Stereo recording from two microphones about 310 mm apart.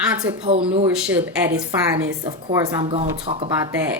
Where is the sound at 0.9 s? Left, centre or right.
Centre.